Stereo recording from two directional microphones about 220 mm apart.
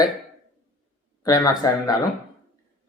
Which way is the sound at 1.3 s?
15° left (ahead or behind).